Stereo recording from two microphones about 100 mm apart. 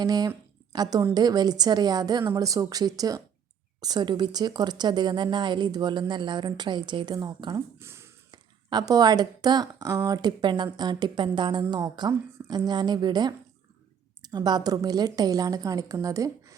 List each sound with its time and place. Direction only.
0.0 s a woman's voice: 40° right (ahead or behind)
7.8 s a sound: 25° right (ahead or behind)
8.3 s a woman's voice: 40° right (ahead or behind)